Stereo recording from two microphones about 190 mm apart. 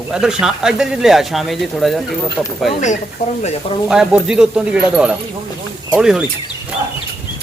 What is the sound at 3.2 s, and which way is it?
Speech, 40° left (ahead or behind).